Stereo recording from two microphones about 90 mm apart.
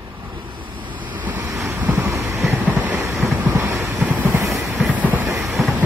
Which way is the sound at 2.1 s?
35° right (ahead or behind).